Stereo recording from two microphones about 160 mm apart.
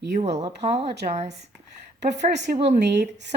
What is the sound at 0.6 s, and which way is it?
Speech, 40° right (ahead or behind).